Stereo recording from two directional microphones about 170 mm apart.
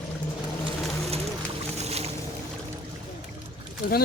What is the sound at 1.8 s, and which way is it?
Boat, 40° right (ahead or behind).